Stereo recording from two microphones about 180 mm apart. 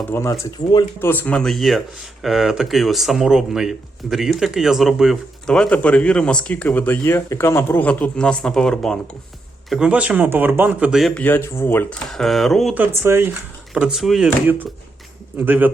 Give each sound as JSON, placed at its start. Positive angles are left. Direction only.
{"t": 0.1, "sound": "speech", "side_deg": 20}
{"t": 0.9, "sound": "speech", "side_deg": 10}
{"t": 12.1, "sound": "speech", "side_deg": 0}
{"t": 13.7, "sound": "speech", "side_deg": -5}